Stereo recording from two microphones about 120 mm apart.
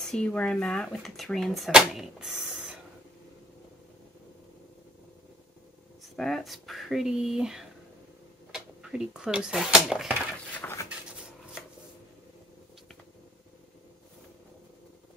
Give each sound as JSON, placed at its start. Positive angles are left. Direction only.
{"t": 0.1, "sound": "speech", "side_deg": 10}
{"t": 6.1, "sound": "speech", "side_deg": 5}
{"t": 10.5, "sound": "a sound", "side_deg": 20}